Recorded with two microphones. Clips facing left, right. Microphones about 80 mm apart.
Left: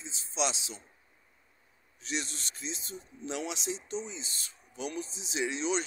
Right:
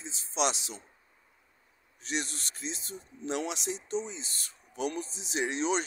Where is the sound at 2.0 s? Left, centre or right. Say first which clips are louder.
Right 2 dB; right.